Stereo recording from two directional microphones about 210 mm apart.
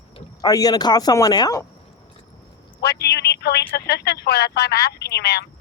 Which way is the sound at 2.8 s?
50° left (ahead or behind).